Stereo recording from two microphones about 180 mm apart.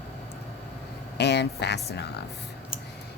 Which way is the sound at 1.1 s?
70° left (ahead or behind).